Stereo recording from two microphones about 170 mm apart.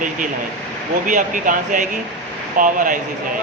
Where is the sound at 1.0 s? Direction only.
50° right (ahead or behind).